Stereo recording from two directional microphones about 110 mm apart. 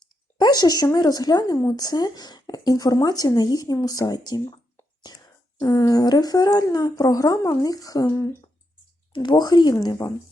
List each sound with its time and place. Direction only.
0.3 s speech: 40° left (ahead or behind)
9.1 s speech: 45° left (ahead or behind)